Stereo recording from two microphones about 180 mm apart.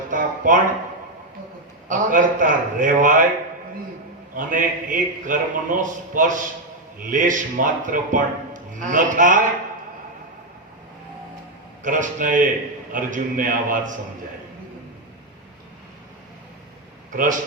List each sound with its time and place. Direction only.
0.1 s a sound: 45° right (ahead or behind)
1.9 s speech: 45° right (ahead or behind)
4.4 s speech: 50° right (ahead or behind)
11.8 s speech: 45° right (ahead or behind)
17.1 s speech: 45° right (ahead or behind)